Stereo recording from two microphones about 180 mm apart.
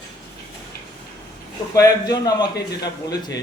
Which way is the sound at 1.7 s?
20° left (ahead or behind).